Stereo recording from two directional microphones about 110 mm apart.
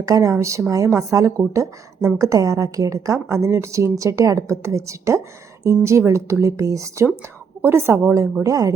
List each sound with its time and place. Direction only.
0.0 s a woman's voice: 30° right (ahead or behind)